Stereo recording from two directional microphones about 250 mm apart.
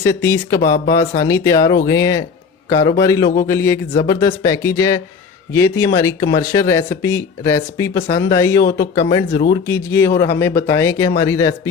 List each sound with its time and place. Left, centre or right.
0.0 s a man's voice: centre